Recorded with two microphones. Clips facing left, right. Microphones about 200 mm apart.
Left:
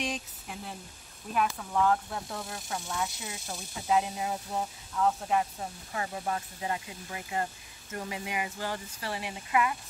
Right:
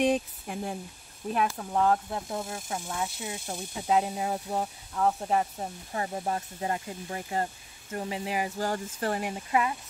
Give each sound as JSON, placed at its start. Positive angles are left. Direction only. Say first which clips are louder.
{"t": 0.0, "sound": "speech", "louder": "right 10 dB", "side_deg": -50}
{"t": 1.3, "sound": "speech", "louder": "right 1 dB", "side_deg": -35}